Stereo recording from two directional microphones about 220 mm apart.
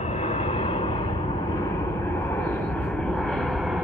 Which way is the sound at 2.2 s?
10° left (ahead or behind).